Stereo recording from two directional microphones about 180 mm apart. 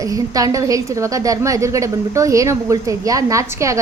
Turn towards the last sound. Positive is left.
turn(degrees=-15)  # may be behind; listen again after turning